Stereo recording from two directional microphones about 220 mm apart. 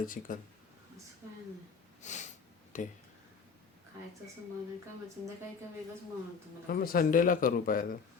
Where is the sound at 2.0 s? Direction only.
30° left (ahead or behind).